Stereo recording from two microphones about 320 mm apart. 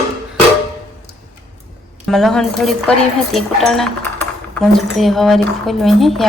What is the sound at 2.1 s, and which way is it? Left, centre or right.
A woman's voice, centre.